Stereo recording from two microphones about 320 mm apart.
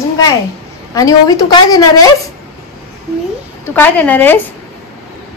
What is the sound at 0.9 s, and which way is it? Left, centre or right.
Speech, centre.